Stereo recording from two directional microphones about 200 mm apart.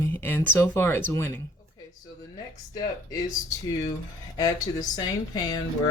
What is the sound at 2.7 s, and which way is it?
Speech, 20° left (ahead or behind).